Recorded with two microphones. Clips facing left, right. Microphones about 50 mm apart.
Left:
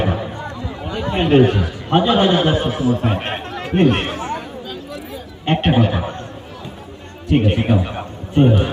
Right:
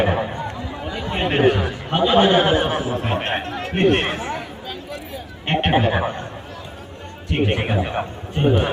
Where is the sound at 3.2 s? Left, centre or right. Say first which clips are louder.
Right 1 dB; centre.